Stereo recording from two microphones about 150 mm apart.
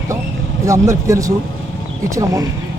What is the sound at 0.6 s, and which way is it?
A man's voice, 20° right (ahead or behind).